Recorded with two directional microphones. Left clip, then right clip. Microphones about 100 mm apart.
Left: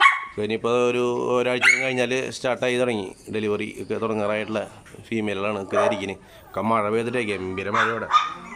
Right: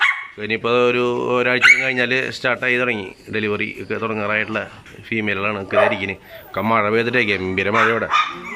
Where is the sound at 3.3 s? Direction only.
20° left (ahead or behind).